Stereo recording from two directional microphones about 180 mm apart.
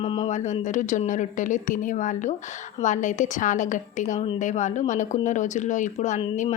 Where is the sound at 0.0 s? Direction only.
35° left (ahead or behind).